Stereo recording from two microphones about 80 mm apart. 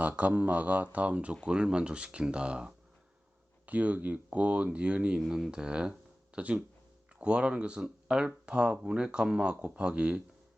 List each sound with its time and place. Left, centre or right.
0.0 s speech: centre